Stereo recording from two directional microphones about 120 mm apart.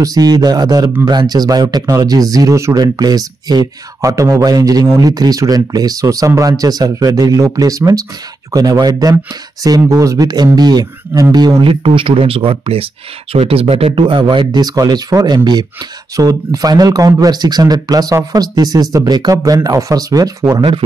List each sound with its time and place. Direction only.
0.0 s speech: 30° right (ahead or behind)
11.8 s speech: 45° right (ahead or behind)